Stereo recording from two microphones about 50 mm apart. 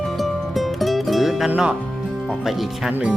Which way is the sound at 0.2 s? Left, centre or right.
Centre.